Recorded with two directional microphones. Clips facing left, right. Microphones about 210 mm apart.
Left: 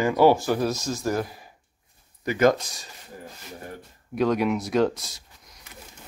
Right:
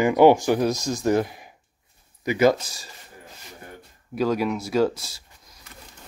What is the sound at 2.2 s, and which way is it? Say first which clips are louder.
Speech: right 1 dB; 10° right (ahead or behind).